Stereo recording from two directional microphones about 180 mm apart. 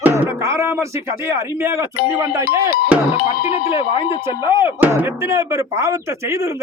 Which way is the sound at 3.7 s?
30° left (ahead or behind).